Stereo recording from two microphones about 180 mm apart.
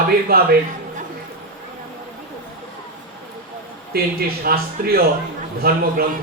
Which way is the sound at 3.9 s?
55° right (ahead or behind).